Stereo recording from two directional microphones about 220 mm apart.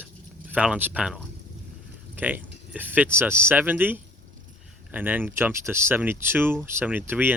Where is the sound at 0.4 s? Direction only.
5° right (ahead or behind).